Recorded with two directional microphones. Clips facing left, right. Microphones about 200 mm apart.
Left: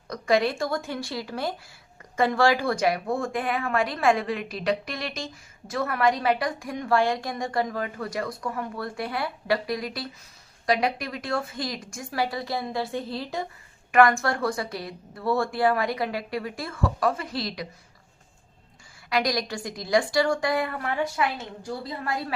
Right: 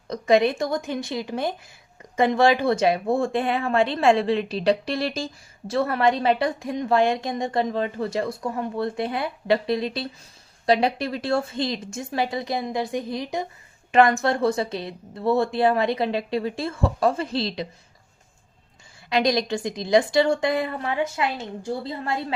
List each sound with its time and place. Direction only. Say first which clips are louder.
0.1 s speech: right 4 dB; 20° right (ahead or behind)
19.1 s speech: right 4 dB; 25° right (ahead or behind)